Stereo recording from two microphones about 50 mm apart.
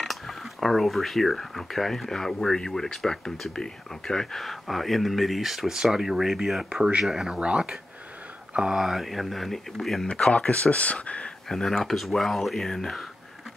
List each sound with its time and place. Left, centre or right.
0.0 s speech: centre
6.7 s speech: centre
8.8 s speech: centre
10.3 s speech: left
11.4 s speech: centre